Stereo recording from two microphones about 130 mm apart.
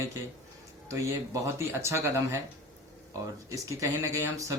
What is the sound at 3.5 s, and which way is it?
Speech, 25° right (ahead or behind).